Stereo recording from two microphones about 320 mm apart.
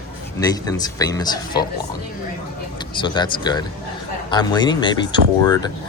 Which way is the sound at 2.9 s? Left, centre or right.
Centre.